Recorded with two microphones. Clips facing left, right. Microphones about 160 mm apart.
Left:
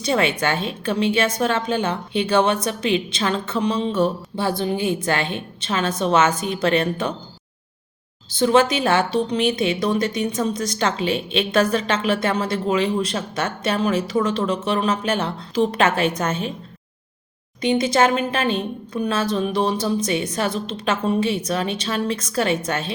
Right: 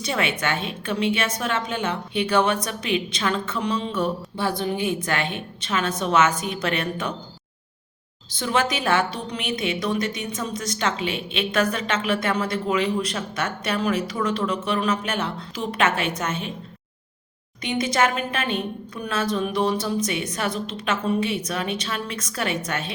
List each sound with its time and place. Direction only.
0.0 s a woman's voice: 35° left (ahead or behind)
8.3 s a woman's voice: 30° left (ahead or behind)
17.6 s a woman's voice: 30° left (ahead or behind)